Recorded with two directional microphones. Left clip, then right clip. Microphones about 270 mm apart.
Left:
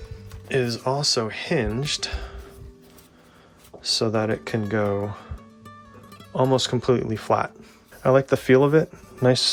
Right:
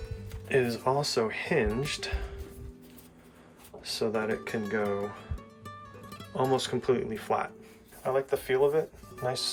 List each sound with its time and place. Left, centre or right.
0.4 s speech: centre
3.8 s speech: centre
5.6 s music: centre
6.5 s speech: centre